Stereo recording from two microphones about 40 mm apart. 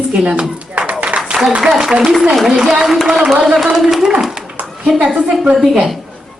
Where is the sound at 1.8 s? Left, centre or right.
Centre.